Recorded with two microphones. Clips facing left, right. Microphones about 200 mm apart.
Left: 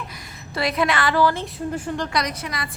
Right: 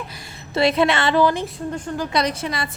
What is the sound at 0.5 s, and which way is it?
A woman's voice, 25° right (ahead or behind).